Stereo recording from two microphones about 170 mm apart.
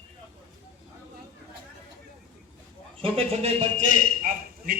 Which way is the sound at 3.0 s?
35° right (ahead or behind).